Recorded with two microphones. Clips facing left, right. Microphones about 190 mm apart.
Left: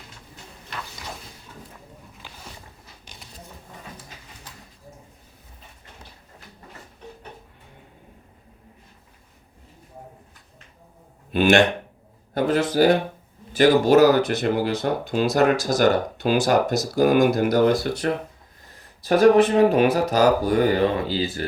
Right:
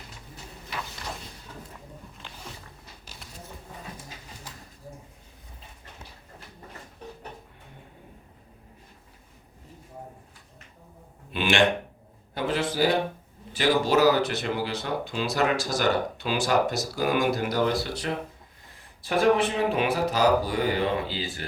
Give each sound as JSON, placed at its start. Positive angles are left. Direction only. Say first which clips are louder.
{"t": 11.3, "sound": "speech", "louder": "left 6 dB", "side_deg": 45}